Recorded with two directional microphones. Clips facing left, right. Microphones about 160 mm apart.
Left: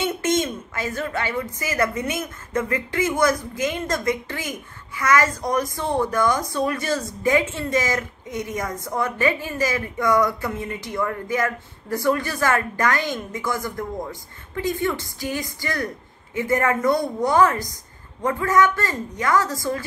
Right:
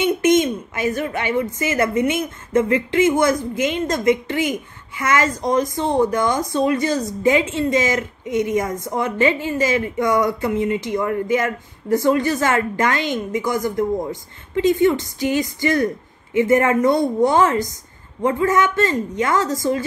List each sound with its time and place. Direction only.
0.0 s a woman's voice: 15° right (ahead or behind)